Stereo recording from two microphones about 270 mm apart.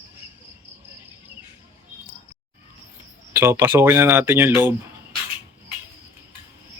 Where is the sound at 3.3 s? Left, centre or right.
Centre.